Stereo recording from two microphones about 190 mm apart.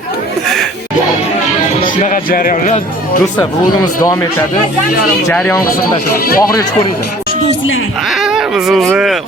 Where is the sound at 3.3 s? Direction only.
20° left (ahead or behind).